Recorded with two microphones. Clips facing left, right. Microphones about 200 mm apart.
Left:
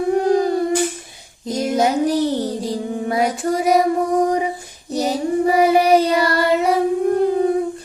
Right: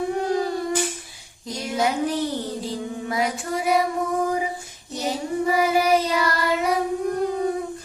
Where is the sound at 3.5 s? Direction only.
40° left (ahead or behind).